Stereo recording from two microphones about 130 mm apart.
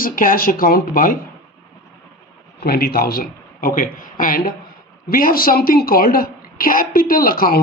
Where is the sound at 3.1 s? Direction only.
90° left.